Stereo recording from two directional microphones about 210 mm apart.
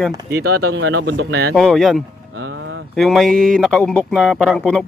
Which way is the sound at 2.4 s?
60° right (ahead or behind).